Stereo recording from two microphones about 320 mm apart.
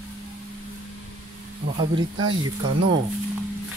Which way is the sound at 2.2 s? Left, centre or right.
Right.